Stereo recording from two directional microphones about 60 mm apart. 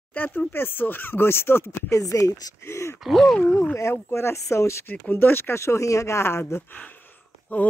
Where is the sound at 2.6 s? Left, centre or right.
Left.